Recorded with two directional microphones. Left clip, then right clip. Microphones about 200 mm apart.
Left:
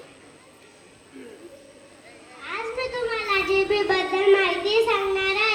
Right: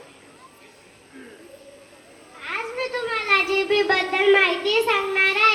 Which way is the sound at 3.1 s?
25° left (ahead or behind).